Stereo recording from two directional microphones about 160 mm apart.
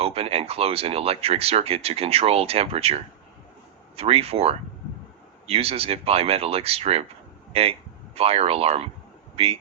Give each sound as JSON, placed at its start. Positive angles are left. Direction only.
{"t": 0.0, "sound": "speech", "side_deg": -35}